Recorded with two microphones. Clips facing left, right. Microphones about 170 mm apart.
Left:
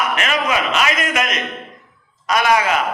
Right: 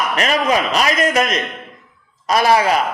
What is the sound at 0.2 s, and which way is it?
A man's voice, 35° right (ahead or behind).